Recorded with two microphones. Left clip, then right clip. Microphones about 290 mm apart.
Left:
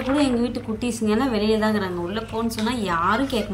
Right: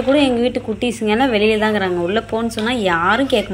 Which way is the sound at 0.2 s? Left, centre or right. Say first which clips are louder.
Right 6 dB; centre.